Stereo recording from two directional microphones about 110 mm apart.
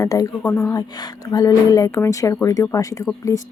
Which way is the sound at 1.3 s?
30° left (ahead or behind).